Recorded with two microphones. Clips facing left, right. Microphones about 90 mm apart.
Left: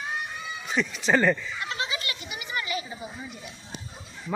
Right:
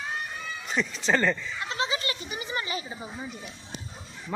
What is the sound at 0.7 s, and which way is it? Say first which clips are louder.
Speech: left 2 dB; 5° left (ahead or behind).